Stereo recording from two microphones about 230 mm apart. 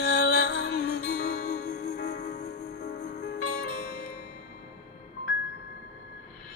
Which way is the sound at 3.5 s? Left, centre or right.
Left.